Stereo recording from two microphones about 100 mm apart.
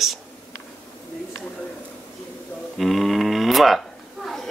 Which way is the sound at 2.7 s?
Centre (ahead or behind).